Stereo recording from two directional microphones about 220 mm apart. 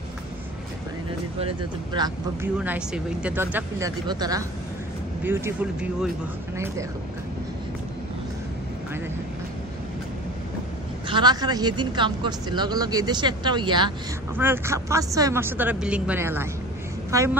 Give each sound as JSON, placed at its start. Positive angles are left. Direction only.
{"t": 2.6, "sound": "speech", "side_deg": -5}
{"t": 11.1, "sound": "speech", "side_deg": -20}
{"t": 14.3, "sound": "speech", "side_deg": -10}